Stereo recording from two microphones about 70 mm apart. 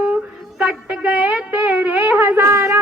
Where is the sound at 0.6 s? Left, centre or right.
Centre.